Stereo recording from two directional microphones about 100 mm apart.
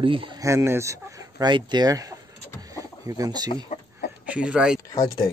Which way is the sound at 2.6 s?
35° right (ahead or behind).